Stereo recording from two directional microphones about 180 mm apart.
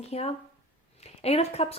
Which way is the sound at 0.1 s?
35° left (ahead or behind).